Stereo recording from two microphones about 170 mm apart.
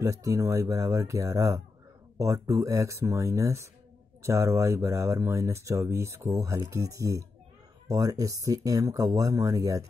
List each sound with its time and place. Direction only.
0.0 s speech: 20° right (ahead or behind)